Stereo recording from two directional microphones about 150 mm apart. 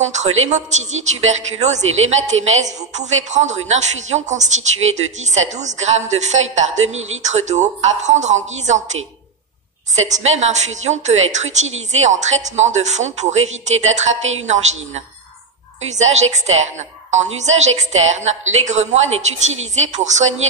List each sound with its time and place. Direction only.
0.0 s a woman's voice: 50° right (ahead or behind)
10.0 s a woman's voice: 50° right (ahead or behind)